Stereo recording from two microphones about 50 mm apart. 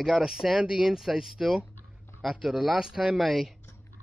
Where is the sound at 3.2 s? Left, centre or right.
Centre.